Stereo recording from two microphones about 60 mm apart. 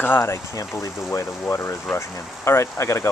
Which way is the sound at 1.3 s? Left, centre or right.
Left.